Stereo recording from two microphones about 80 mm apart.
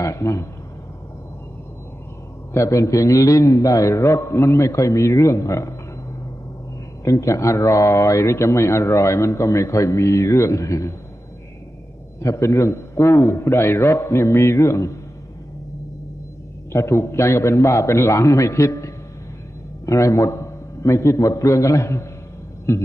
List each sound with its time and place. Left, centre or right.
0.0 s a man's voice: left
2.5 s a man's voice: left
7.1 s a man's voice: left
12.2 s a man's voice: left
16.7 s a man's voice: left
19.9 s a man's voice: left